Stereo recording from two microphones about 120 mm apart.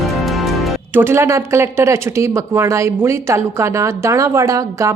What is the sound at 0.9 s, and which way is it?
Speech, 20° right (ahead or behind).